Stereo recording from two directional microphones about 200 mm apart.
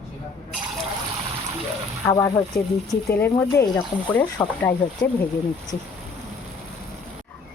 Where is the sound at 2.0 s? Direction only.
15° left (ahead or behind).